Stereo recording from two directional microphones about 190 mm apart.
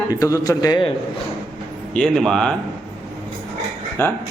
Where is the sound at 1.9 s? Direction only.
5° left (ahead or behind).